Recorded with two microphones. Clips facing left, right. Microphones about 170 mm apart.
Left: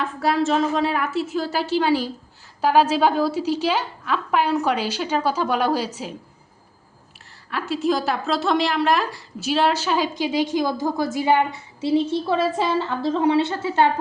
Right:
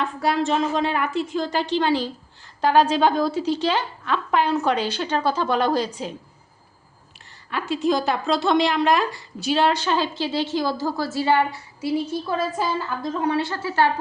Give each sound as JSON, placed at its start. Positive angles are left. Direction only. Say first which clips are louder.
{"t": 0.0, "sound": "a woman's voice", "louder": "left 1 dB", "side_deg": 0}
{"t": 7.5, "sound": "a woman's voice", "louder": "even", "side_deg": 0}